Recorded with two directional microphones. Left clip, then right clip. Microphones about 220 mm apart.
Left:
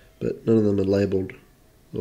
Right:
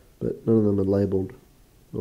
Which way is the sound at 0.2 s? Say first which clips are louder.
Left 1 dB; centre (ahead or behind).